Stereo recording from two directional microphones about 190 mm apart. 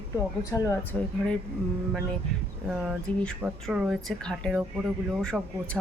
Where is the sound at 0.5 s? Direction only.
15° left (ahead or behind).